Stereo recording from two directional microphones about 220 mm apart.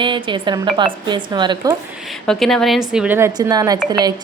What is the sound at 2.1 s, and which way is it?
A woman's voice, centre (ahead or behind).